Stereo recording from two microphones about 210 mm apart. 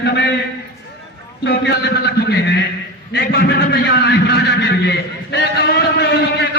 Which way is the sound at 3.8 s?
55° left (ahead or behind).